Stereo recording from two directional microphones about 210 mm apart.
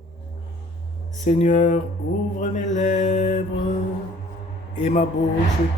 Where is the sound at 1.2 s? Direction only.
35° left (ahead or behind).